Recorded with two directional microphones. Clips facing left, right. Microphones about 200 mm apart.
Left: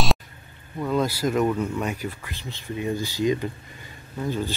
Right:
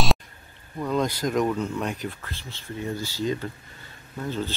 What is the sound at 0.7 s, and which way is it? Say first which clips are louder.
Speech: left 1 dB; 5° left (ahead or behind).